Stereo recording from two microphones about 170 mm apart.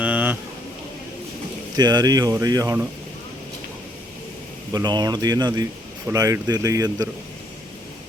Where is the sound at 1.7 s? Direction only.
25° right (ahead or behind).